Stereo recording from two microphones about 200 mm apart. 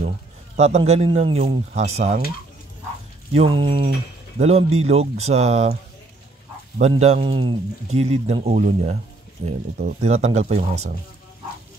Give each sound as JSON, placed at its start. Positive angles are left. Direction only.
{"t": 0.6, "sound": "speech", "side_deg": -35}
{"t": 3.3, "sound": "speech", "side_deg": -25}
{"t": 6.8, "sound": "speech", "side_deg": -35}